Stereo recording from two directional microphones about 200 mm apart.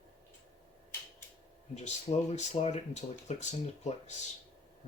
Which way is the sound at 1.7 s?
35° left (ahead or behind).